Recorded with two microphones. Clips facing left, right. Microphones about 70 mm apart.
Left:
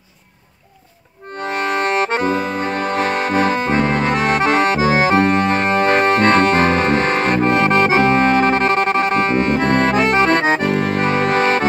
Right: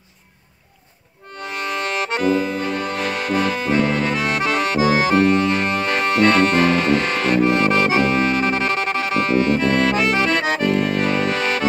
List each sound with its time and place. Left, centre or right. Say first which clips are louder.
1.4 s accordion: left 6 dB; left